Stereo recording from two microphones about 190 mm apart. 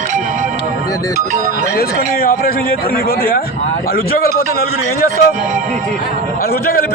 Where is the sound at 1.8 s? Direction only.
50° left (ahead or behind).